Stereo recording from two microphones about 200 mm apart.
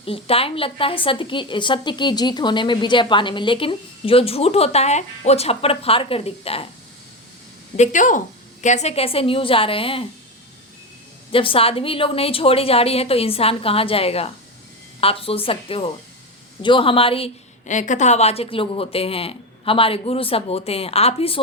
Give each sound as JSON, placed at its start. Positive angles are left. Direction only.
{"t": 0.0, "sound": "a woman's voice", "side_deg": 30}
{"t": 7.8, "sound": "a woman's voice", "side_deg": 40}
{"t": 11.3, "sound": "a woman's voice", "side_deg": 25}